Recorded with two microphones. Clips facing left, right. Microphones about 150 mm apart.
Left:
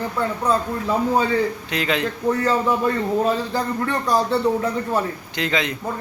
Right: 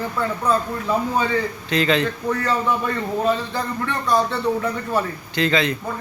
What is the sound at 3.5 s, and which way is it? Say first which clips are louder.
Speech: left 2 dB; 40° left (ahead or behind).